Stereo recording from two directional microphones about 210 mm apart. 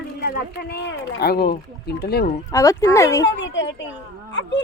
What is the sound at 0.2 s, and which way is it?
Speech, 50° left (ahead or behind).